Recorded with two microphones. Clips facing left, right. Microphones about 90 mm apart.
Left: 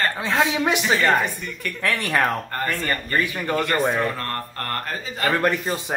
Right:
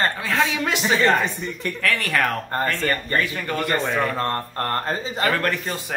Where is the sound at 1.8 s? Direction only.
25° left (ahead or behind).